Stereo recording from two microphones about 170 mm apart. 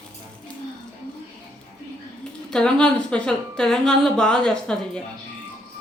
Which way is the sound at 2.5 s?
5° left (ahead or behind).